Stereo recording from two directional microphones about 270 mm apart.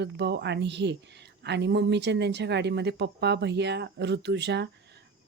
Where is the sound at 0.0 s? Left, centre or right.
Right.